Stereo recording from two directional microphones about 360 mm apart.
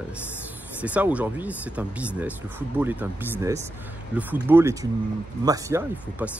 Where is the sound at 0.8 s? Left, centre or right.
Centre.